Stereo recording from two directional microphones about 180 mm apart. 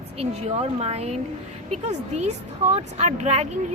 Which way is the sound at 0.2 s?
35° right (ahead or behind).